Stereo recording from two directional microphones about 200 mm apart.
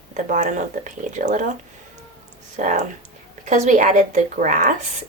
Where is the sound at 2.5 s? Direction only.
40° right (ahead or behind).